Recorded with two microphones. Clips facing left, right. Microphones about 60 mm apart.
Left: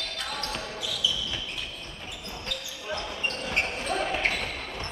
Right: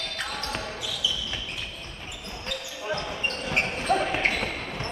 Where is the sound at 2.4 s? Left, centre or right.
Right.